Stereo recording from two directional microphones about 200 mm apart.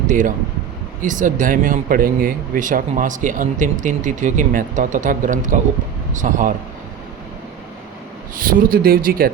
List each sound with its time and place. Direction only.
0.1 s speech: 40° right (ahead or behind)
8.4 s speech: 45° right (ahead or behind)